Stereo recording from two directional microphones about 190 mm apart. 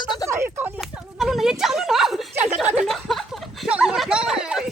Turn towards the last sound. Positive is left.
turn(degrees=-5)  # may be behind; listen again after turning